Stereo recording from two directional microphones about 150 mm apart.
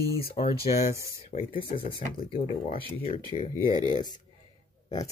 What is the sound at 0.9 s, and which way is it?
Speech, 20° right (ahead or behind).